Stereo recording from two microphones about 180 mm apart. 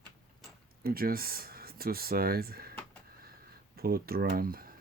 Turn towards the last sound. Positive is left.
turn(degrees=-55)  # may be behind; listen again after turning